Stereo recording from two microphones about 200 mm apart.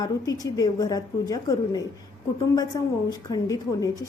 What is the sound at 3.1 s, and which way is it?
Speech, 15° left (ahead or behind).